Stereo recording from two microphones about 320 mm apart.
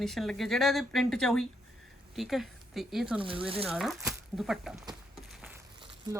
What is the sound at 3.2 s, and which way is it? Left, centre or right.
Speech, centre.